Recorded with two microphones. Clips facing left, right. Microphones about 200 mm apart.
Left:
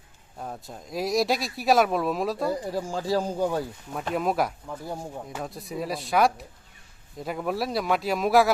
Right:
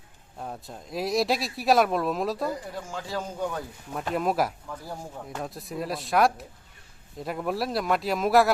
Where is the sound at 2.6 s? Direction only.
35° left (ahead or behind).